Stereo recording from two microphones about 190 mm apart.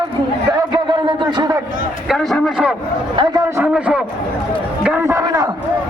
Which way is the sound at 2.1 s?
Centre (ahead or behind).